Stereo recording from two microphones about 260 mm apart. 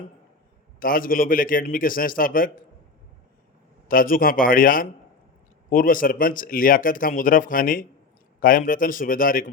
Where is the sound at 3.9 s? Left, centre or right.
Left.